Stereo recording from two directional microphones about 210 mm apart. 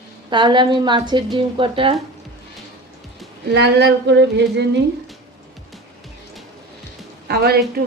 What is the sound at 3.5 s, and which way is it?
Speech, 55° right (ahead or behind).